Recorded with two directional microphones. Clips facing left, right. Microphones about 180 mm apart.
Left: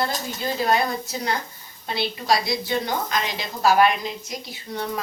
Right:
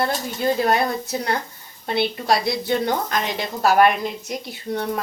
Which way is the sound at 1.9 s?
55° right (ahead or behind).